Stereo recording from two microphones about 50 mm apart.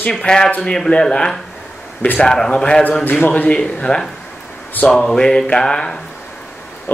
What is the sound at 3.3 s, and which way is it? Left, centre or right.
Speech, left.